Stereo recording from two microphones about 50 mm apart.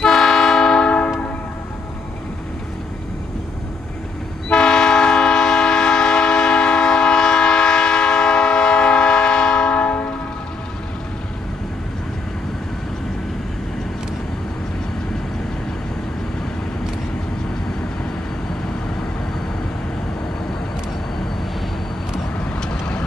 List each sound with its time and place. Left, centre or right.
0.0 s train: centre
4.5 s train: centre
22.4 s vehicle: centre